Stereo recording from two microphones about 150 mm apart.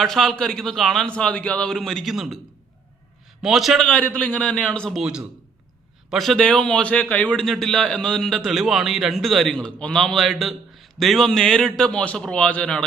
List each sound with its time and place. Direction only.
0.0 s a man's voice: centre (ahead or behind)
3.4 s a man's voice: centre (ahead or behind)